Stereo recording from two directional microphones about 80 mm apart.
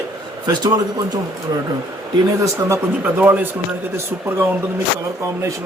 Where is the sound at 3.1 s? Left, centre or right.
Right.